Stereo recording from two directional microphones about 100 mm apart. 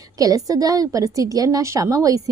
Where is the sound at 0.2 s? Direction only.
35° right (ahead or behind).